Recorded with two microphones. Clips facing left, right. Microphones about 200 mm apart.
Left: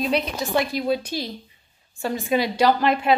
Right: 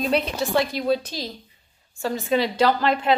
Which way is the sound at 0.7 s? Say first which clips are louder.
Even; 10° left (ahead or behind).